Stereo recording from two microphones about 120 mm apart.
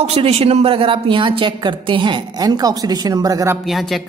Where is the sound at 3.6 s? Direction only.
Centre (ahead or behind).